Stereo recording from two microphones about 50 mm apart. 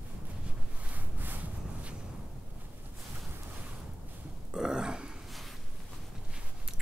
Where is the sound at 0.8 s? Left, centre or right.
Right.